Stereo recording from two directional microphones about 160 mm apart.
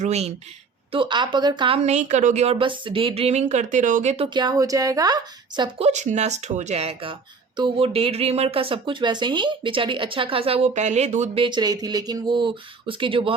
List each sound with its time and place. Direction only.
0.0 s speech: 40° right (ahead or behind)
0.9 s speech: 30° right (ahead or behind)
4.4 s speech: 25° right (ahead or behind)
5.8 s speech: 45° right (ahead or behind)
11.4 s speech: 25° right (ahead or behind)